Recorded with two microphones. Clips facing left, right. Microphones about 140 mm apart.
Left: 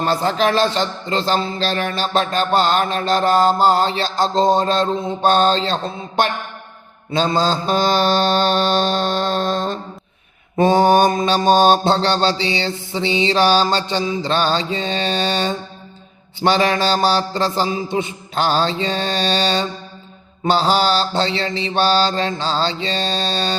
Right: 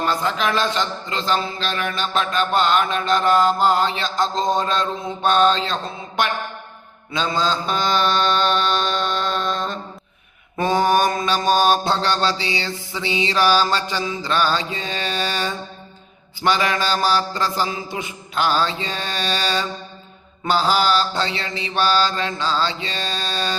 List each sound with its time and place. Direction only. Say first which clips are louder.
0.0 s a man's voice: left 4 dB; 35° left (ahead or behind)
10.6 s mantra: left 5 dB; 30° left (ahead or behind)